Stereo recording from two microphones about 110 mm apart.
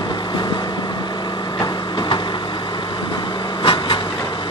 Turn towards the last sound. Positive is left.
turn(degrees=50)  # may be behind; listen again after turning